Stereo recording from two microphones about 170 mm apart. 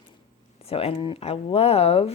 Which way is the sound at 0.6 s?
35° left (ahead or behind).